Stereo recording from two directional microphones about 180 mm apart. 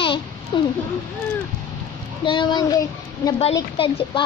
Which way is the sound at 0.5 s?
25° left (ahead or behind).